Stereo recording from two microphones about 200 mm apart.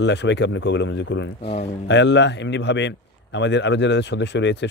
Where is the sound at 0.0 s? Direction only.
60° left (ahead or behind).